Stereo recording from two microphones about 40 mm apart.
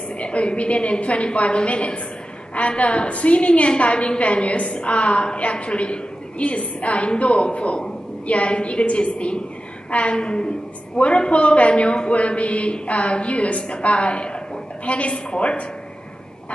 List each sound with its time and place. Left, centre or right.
0.2 s a woman's voice: left
10.1 s a woman's voice: left